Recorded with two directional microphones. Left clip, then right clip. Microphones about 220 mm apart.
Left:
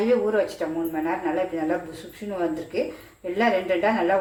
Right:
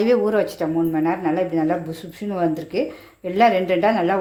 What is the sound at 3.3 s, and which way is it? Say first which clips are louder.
Speech: right 6 dB; 50° right (ahead or behind).